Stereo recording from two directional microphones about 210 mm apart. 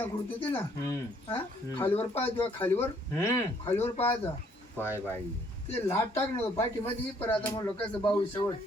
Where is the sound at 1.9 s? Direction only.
25° left (ahead or behind).